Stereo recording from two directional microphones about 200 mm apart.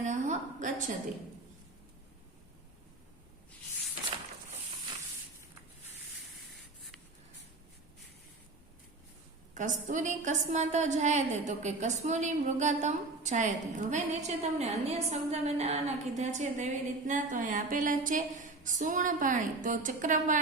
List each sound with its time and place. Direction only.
0.0 s a woman's voice: 40° right (ahead or behind)
9.6 s a woman's voice: 35° right (ahead or behind)